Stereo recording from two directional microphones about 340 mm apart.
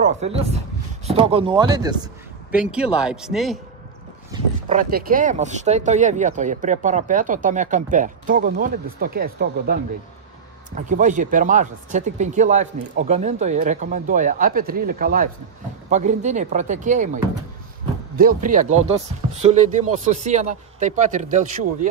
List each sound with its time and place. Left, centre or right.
0.0 s speech: centre
4.3 s speech: right